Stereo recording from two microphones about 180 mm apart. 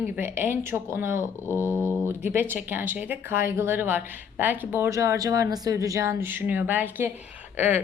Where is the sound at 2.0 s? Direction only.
10° right (ahead or behind).